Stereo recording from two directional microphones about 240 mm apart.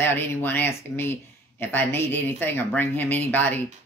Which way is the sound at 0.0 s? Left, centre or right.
Centre.